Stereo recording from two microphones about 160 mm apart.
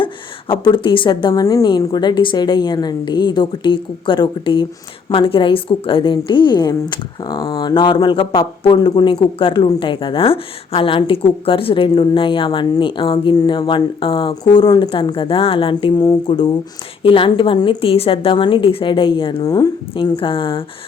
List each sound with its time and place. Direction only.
0.0 s a woman's voice: 30° left (ahead or behind)